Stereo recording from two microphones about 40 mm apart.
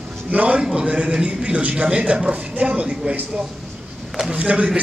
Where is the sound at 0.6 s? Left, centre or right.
Right.